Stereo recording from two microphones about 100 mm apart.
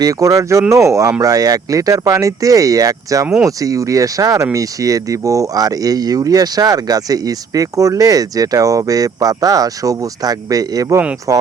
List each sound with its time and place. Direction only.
0.0 s speech: 35° right (ahead or behind)